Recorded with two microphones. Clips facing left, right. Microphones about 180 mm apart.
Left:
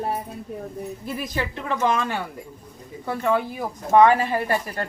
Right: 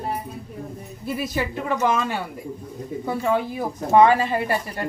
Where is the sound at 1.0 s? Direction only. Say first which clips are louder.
Right 4 dB; 10° right (ahead or behind).